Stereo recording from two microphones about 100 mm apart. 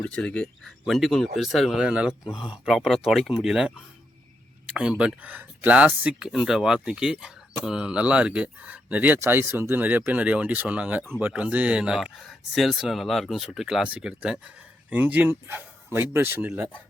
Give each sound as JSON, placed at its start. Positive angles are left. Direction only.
{"t": 0.0, "sound": "speech", "side_deg": 10}
{"t": 1.8, "sound": "speech", "side_deg": -10}